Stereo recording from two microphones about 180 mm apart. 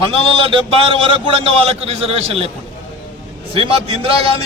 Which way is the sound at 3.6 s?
30° right (ahead or behind).